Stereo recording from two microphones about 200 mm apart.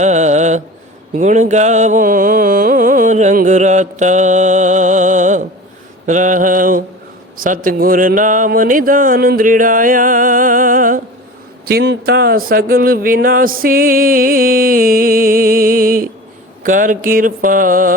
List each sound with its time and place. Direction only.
0.0 s mantra: 35° right (ahead or behind)
1.1 s a sound: 40° right (ahead or behind)
7.3 s speech: 45° right (ahead or behind)
11.6 s speech: 55° right (ahead or behind)